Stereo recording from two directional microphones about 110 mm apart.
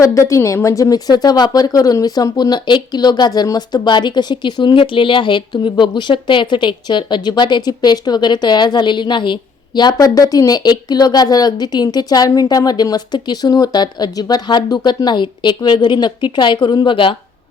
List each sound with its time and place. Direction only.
0.0 s a woman's voice: 30° left (ahead or behind); by 17.2 s 50° left (ahead or behind)